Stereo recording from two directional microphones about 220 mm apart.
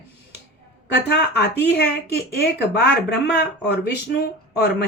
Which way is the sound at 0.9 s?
50° left (ahead or behind).